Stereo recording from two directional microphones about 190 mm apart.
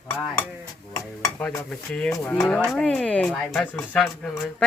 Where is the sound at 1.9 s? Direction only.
5° left (ahead or behind).